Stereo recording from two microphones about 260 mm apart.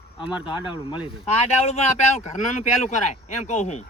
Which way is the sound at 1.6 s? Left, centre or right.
Left.